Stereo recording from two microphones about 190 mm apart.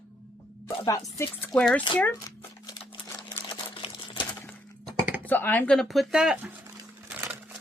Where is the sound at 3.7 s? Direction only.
25° left (ahead or behind).